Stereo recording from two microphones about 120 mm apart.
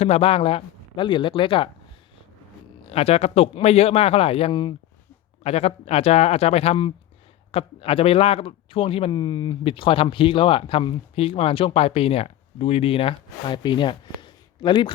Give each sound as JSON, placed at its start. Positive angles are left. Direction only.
{"t": 0.0, "sound": "speech", "side_deg": 55}
{"t": 2.9, "sound": "speech", "side_deg": 60}
{"t": 5.4, "sound": "speech", "side_deg": 60}
{"t": 9.1, "sound": "speech", "side_deg": 35}
{"t": 9.6, "sound": "speech", "side_deg": 45}